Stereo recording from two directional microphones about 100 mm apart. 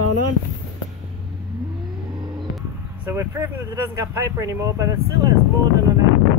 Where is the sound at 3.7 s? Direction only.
35° right (ahead or behind).